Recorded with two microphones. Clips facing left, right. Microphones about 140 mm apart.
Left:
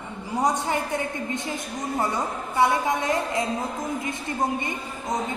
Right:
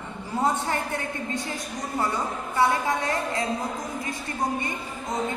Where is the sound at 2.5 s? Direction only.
20° left (ahead or behind).